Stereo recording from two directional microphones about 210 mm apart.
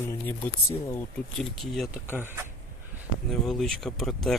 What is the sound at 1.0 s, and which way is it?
Speech, centre (ahead or behind).